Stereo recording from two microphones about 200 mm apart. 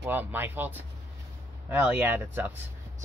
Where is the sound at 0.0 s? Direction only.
10° right (ahead or behind).